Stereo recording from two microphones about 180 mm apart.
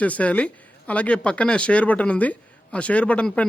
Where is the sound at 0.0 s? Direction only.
10° left (ahead or behind).